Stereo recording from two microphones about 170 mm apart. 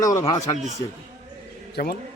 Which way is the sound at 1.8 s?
60° left (ahead or behind).